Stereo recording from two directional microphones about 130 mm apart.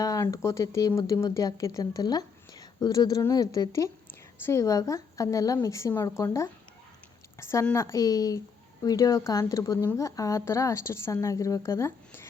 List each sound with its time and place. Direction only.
0.0 s a woman's voice: 25° left (ahead or behind)